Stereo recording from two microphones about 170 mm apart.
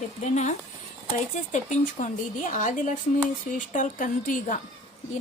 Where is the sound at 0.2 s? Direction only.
40° left (ahead or behind).